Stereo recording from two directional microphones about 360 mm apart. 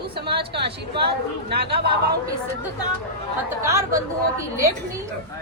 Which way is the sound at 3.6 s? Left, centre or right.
Centre.